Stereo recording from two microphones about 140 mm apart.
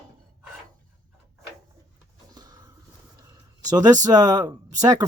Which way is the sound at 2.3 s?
25° right (ahead or behind).